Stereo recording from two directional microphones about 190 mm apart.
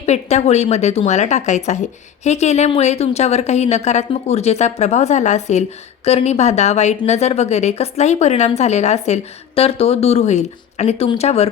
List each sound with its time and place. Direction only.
0.0 s speech: 35° left (ahead or behind)